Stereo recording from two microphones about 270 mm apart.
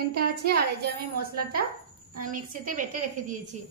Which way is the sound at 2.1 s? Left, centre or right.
Right.